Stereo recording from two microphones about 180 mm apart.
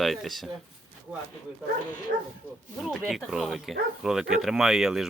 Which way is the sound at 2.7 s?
Centre (ahead or behind).